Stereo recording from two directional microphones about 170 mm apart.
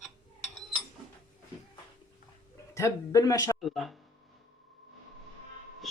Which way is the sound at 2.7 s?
20° left (ahead or behind).